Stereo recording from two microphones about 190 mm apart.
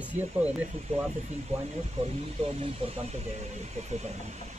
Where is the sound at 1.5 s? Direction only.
35° right (ahead or behind).